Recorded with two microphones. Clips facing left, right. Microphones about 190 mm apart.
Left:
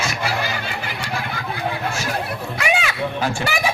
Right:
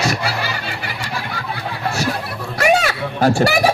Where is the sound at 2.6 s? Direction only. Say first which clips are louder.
Right 6 dB; 40° right (ahead or behind).